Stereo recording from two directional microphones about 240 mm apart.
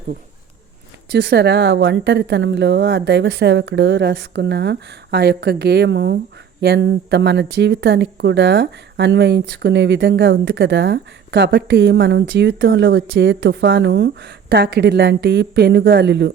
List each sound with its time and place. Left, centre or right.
1.1 s speech: right